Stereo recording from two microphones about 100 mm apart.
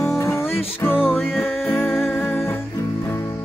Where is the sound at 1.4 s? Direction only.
20° left (ahead or behind).